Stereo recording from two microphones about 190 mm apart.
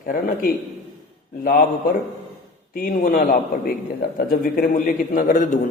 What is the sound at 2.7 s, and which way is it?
A man's voice, 45° left (ahead or behind).